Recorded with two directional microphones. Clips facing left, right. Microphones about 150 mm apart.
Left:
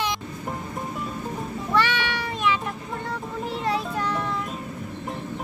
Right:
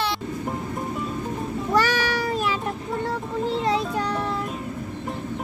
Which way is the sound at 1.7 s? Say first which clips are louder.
Right 2 dB; 40° right (ahead or behind).